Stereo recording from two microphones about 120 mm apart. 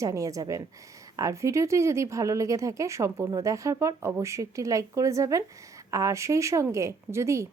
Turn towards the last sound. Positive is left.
turn(degrees=-25)  # may be behind; listen again after turning